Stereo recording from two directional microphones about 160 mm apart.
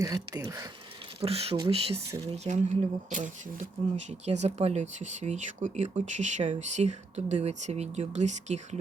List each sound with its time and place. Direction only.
0.0 s speech: 25° right (ahead or behind)
1.2 s speech: 40° right (ahead or behind)
2.0 s speech: 20° right (ahead or behind)
2.3 s speech: 45° right (ahead or behind)